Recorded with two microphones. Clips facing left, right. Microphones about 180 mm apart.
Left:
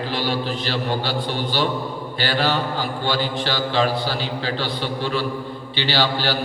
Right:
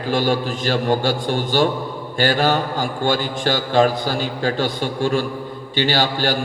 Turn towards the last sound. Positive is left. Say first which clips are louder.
# right 2 dB
turn(degrees=-45)  # may be behind; listen again after turning